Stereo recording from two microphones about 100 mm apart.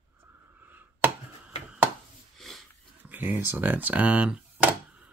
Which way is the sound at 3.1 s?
20° right (ahead or behind).